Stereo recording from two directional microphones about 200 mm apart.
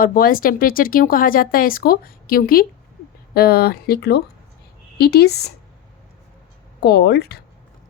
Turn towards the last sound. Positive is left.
turn(degrees=55)  # may be behind; listen again after turning